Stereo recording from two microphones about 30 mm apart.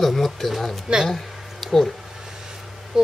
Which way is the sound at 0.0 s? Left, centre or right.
Centre.